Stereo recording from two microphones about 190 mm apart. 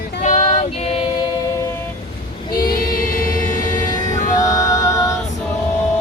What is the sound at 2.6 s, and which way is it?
Choir, 50° left (ahead or behind).